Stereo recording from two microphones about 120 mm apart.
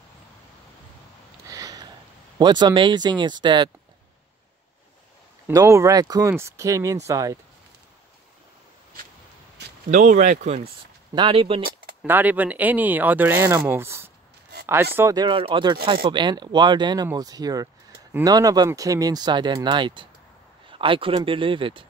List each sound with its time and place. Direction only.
1.5 s a sound: 30° right (ahead or behind)
2.3 s speech: 35° right (ahead or behind)
5.5 s speech: 25° right (ahead or behind)
9.8 s speech: 90° right; by 10.6 s 75° right (ahead or behind)
11.1 s speech: 50° right (ahead or behind)
12.1 s speech: 15° right (ahead or behind)
15.1 s speech: 40° right (ahead or behind)